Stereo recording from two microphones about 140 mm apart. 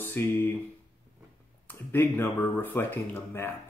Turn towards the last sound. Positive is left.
turn(degrees=15)  # may be behind; listen again after turning